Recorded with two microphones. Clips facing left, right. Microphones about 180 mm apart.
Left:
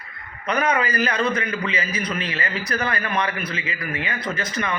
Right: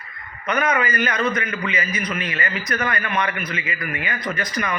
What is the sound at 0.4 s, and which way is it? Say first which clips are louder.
A man's voice: even; 30° left (ahead or behind).